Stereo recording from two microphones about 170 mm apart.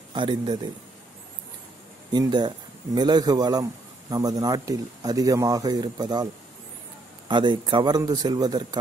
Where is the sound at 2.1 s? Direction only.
25° right (ahead or behind).